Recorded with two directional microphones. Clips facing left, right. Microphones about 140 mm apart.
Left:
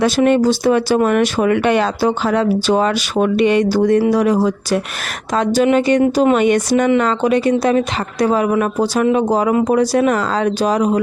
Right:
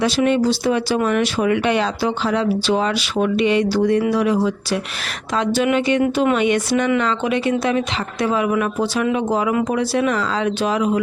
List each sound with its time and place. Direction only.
0.0 s speech: 50° left (ahead or behind)
6.3 s speech: 45° left (ahead or behind)